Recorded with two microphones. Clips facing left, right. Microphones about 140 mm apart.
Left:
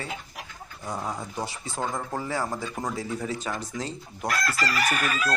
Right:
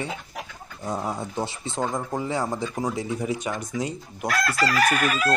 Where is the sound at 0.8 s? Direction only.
20° right (ahead or behind).